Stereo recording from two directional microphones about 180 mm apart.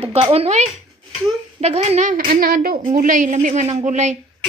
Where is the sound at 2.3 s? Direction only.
55° right (ahead or behind).